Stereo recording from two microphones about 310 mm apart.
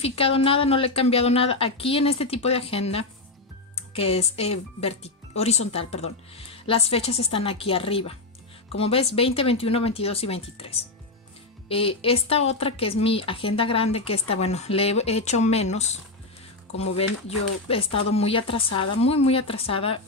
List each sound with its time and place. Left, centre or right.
0.0 s a woman's voice: centre